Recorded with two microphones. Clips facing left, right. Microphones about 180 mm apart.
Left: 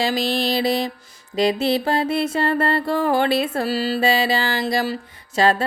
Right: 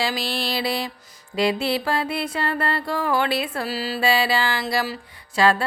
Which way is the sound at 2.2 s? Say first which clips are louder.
Left 5 dB; 45° left (ahead or behind).